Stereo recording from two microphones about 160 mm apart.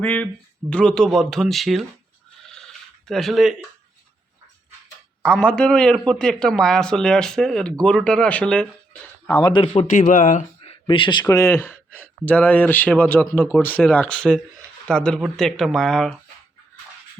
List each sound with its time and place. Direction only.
0.0 s a man's voice: 10° left (ahead or behind)
3.1 s a man's voice: centre (ahead or behind)
5.2 s a man's voice: 5° left (ahead or behind)
9.3 s speech: 30° left (ahead or behind)
9.9 s speech: 50° left (ahead or behind)
10.6 s a man's voice: 35° left (ahead or behind); by 16.1 s 5° left (ahead or behind)